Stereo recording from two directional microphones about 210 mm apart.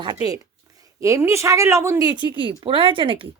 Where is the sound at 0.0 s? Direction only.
20° right (ahead or behind).